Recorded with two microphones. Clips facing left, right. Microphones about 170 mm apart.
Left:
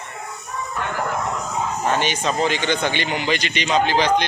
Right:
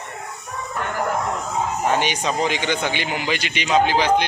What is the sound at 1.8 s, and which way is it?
Speech, 10° right (ahead or behind).